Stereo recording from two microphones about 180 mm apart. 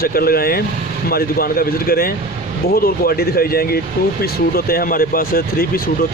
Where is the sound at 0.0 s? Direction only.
55° left (ahead or behind).